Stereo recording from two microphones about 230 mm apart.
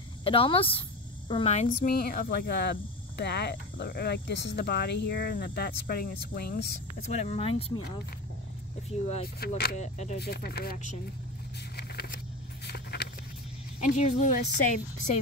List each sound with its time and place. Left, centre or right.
0.2 s speech: left
9.4 s speech: left
9.8 s a woman's voice: left
10.1 s speech: left
11.7 s a sound: left
13.7 s a woman's voice: left